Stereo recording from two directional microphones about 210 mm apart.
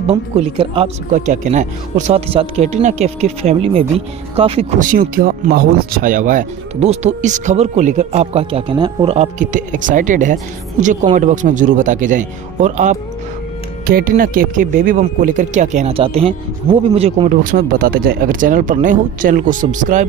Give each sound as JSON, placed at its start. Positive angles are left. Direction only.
{"t": 0.0, "sound": "speech", "side_deg": -30}